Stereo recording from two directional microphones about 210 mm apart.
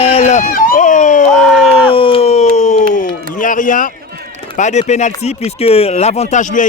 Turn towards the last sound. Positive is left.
turn(degrees=35)  # may be behind; listen again after turning